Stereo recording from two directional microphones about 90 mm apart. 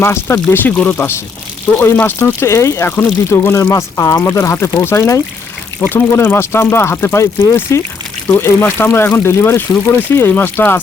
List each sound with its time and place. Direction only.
0.0 s speech: 30° left (ahead or behind)